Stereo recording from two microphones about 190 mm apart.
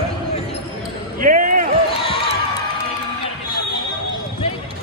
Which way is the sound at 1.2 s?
45° right (ahead or behind).